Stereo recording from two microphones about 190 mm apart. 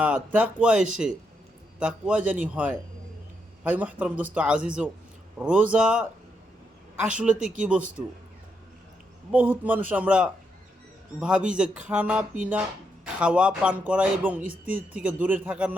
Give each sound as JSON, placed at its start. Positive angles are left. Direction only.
{"t": 0.0, "sound": "speech", "side_deg": -10}
{"t": 9.3, "sound": "speech", "side_deg": -10}